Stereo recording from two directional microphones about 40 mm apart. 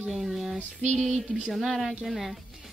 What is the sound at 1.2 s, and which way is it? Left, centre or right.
Speech, right.